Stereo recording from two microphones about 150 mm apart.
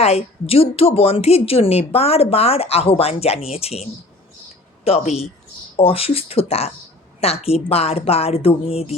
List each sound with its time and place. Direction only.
0.0 s a woman's voice: 45° left (ahead or behind)
4.9 s a woman's voice: 45° left (ahead or behind)